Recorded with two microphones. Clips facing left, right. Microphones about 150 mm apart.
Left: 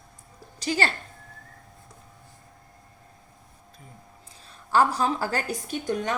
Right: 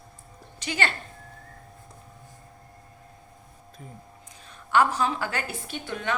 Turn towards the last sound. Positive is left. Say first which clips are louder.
# left 3 dB
turn(degrees=40)  # may be behind; listen again after turning